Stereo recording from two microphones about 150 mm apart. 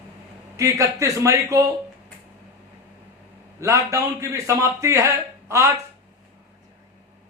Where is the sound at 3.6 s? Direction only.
20° right (ahead or behind).